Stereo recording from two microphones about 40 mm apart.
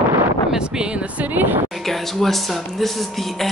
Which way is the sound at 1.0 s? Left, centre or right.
Right.